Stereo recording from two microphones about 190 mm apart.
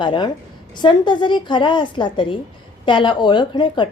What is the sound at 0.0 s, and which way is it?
A woman's voice, 25° left (ahead or behind).